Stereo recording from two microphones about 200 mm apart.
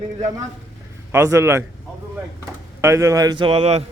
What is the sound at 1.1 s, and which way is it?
Speech, 15° right (ahead or behind).